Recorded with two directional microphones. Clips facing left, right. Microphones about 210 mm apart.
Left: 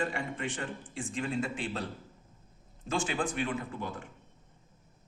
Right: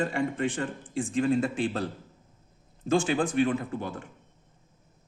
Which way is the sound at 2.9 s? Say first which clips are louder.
Right 7 dB; 40° right (ahead or behind).